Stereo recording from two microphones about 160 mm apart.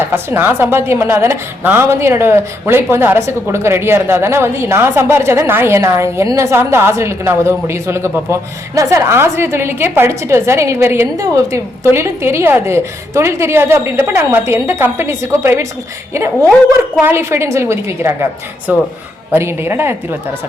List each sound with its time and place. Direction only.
0.1 s a woman's voice: 15° right (ahead or behind)
17.0 s a woman's voice: 15° right (ahead or behind)